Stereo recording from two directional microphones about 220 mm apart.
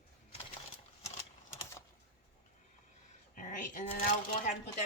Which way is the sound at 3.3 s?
35° left (ahead or behind).